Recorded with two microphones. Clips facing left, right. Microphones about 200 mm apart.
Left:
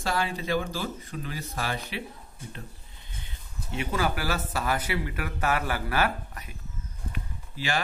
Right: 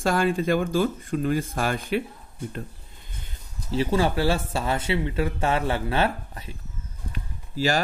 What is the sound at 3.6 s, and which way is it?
Speech, 30° right (ahead or behind).